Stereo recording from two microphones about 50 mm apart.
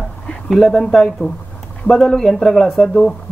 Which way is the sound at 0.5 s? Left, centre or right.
Centre.